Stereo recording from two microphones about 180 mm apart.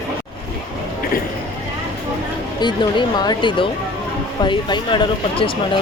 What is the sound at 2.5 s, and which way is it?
Speech, 25° left (ahead or behind).